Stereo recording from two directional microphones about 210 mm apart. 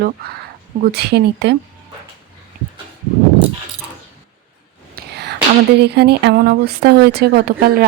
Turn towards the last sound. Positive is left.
turn(degrees=-45)  # may be behind; listen again after turning